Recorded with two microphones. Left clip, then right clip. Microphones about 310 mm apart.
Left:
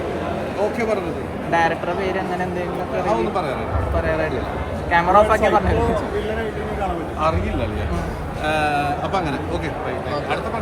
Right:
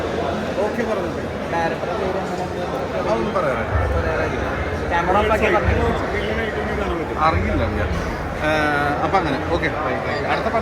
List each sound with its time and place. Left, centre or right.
4.9 s speech: left